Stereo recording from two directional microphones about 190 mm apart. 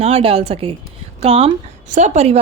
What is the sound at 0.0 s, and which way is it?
A woman's voice, 30° right (ahead or behind).